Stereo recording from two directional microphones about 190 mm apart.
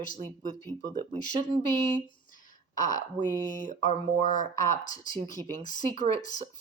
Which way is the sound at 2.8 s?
45° left (ahead or behind).